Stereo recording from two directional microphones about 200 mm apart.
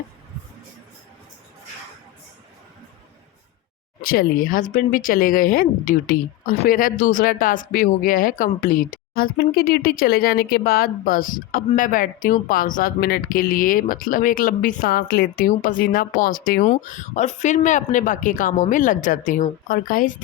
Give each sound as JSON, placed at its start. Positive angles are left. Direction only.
{"t": 4.0, "sound": "speech", "side_deg": 45}